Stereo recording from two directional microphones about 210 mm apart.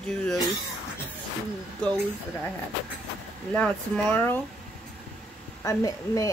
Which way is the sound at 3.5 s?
5° left (ahead or behind).